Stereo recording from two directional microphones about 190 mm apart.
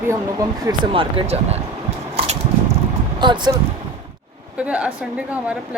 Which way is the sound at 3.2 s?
25° right (ahead or behind).